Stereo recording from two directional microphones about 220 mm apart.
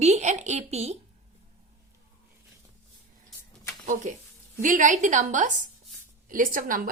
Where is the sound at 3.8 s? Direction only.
35° right (ahead or behind).